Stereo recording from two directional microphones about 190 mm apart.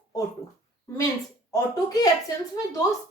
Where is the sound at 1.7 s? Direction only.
20° left (ahead or behind).